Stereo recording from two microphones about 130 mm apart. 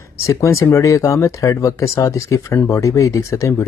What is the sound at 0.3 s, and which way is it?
Speech, 25° left (ahead or behind).